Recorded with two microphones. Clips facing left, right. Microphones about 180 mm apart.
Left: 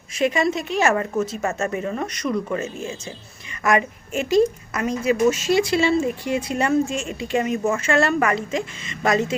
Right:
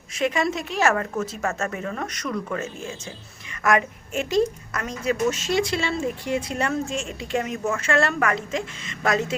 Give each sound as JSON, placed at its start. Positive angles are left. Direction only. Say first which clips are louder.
{"t": 0.2, "sound": "a woman's voice", "louder": "left 3 dB", "side_deg": 0}
{"t": 3.6, "sound": "a woman's voice", "louder": "left 1 dB", "side_deg": 0}